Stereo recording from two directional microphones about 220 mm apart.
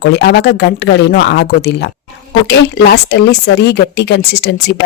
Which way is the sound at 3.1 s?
50° left (ahead or behind).